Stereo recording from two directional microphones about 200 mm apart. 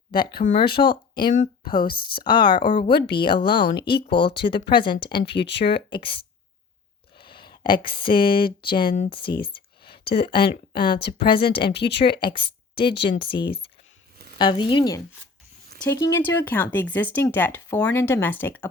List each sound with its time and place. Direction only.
0.1 s speech: 50° left (ahead or behind)
1.6 s speech: 25° left (ahead or behind)
5.3 s speech: 60° left (ahead or behind)
5.9 s speech: 25° left (ahead or behind)
9.9 s a sound: 55° left (ahead or behind)
10.2 s speech: 25° left (ahead or behind)
10.5 s speech: 50° left (ahead or behind)
11.2 s speech: 25° left (ahead or behind)
11.7 s speech: 55° left (ahead or behind)
12.1 s speech: 25° left (ahead or behind)
12.7 s speech: 55° left (ahead or behind)
14.3 s speech: 20° left (ahead or behind)